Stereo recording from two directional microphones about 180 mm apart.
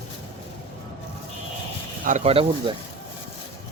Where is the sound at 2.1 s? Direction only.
35° right (ahead or behind).